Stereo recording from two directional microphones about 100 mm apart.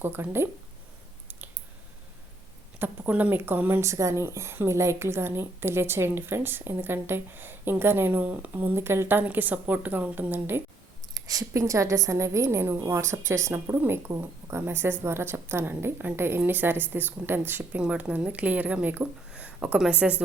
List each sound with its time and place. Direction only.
0.0 s speech: 20° right (ahead or behind)
2.7 s speech: 20° right (ahead or behind)
11.1 s speech: 35° right (ahead or behind); by 20.2 s 15° right (ahead or behind)